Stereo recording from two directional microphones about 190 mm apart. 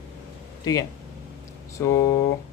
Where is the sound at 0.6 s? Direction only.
20° left (ahead or behind).